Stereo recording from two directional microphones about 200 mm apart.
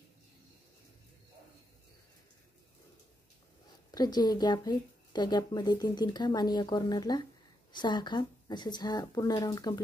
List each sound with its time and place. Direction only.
3.9 s speech: 20° left (ahead or behind)